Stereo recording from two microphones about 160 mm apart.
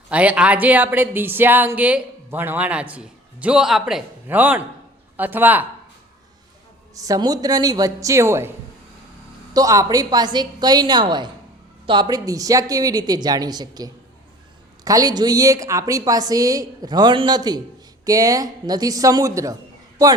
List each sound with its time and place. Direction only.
0.1 s a woman's voice: 10° right (ahead or behind)
6.9 s a woman's voice: 20° right (ahead or behind)